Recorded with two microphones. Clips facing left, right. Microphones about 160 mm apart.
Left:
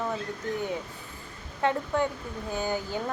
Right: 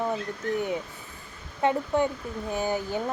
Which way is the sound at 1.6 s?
20° right (ahead or behind).